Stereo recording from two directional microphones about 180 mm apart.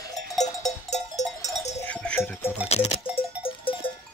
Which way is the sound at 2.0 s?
10° left (ahead or behind).